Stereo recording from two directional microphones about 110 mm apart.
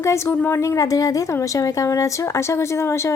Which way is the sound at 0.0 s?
25° left (ahead or behind).